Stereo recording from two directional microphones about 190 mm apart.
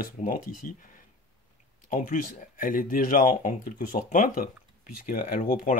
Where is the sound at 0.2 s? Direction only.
45° left (ahead or behind).